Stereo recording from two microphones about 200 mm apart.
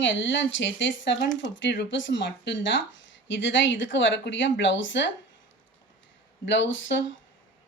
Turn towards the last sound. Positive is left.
turn(degrees=65)  # may be behind; listen again after turning